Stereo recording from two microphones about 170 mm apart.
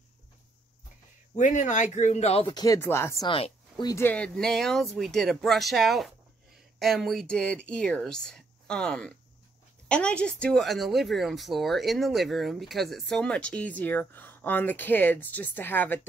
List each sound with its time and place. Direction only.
1.3 s speech: 45° left (ahead or behind); by 3.3 s 15° left (ahead or behind)
3.3 s a woman's voice: 30° left (ahead or behind)
3.9 s speech: 10° left (ahead or behind)